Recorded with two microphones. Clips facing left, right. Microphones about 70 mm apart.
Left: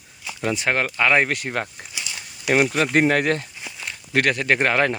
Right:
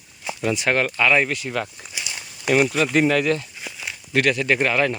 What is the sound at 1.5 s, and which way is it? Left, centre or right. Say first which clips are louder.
Speech: even; left.